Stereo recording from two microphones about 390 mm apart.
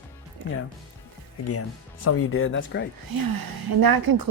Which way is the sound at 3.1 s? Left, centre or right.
Right.